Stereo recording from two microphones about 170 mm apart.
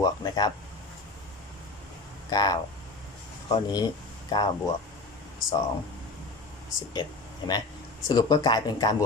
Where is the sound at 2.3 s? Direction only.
20° left (ahead or behind).